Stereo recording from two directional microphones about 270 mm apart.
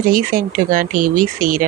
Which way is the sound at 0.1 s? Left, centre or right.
Right.